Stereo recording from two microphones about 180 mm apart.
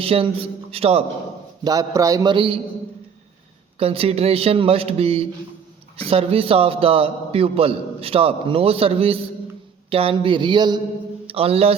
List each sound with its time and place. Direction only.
0.0 s a man's voice: 30° right (ahead or behind)
1.6 s speech: 20° right (ahead or behind)
3.8 s a man's voice: 35° right (ahead or behind)